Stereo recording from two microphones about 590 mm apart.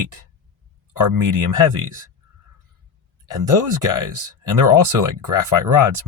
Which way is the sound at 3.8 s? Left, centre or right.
Right.